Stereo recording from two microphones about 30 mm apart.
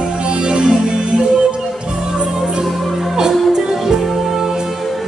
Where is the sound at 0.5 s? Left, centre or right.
Right.